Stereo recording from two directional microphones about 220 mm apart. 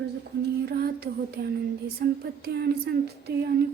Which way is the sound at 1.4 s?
50° right (ahead or behind).